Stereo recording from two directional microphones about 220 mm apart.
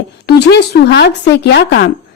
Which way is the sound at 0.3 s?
50° left (ahead or behind).